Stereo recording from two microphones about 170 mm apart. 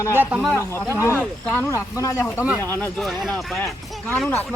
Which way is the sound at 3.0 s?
Centre (ahead or behind).